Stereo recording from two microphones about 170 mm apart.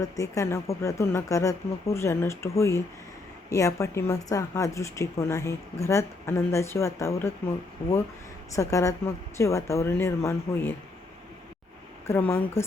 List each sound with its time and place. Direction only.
0.0 s a woman's voice: 20° left (ahead or behind)
8.5 s a woman's voice: 20° left (ahead or behind)
12.0 s a woman's voice: 15° left (ahead or behind)